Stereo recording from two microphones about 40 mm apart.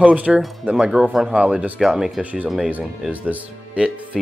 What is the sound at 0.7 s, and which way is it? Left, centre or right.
Speech, centre.